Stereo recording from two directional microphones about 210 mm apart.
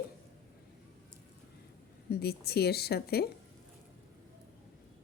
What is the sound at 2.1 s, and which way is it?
A woman's voice, 50° left (ahead or behind).